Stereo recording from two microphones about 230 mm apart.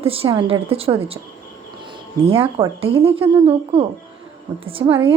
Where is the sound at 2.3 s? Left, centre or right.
Right.